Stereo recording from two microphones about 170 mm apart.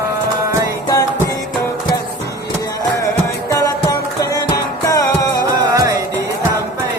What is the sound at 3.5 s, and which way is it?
Music, 20° left (ahead or behind).